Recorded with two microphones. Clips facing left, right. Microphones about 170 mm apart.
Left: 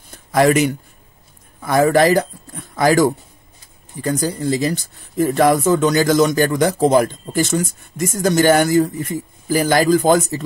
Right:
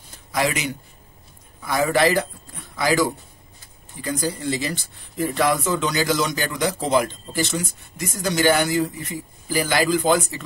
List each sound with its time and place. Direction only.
0.3 s speech: 50° left (ahead or behind)